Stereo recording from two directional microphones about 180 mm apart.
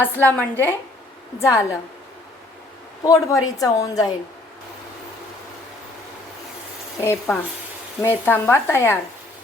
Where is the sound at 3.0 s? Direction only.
20° left (ahead or behind).